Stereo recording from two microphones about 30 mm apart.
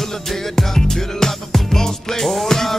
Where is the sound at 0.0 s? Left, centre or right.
Centre.